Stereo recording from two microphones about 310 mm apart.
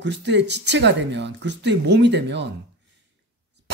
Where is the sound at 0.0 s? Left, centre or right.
Right.